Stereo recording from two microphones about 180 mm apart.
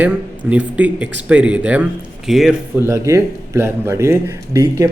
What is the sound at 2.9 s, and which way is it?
A man's voice, 15° right (ahead or behind).